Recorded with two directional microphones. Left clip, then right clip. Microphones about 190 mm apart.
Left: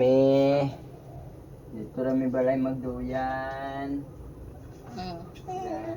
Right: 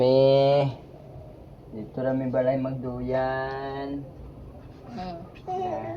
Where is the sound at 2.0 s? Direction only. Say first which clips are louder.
Right 1 dB; 55° right (ahead or behind).